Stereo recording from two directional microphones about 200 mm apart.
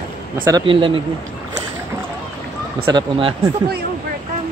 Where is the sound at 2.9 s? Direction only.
25° right (ahead or behind).